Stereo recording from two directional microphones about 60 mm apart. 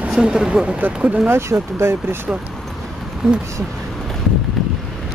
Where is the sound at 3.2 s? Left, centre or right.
Centre.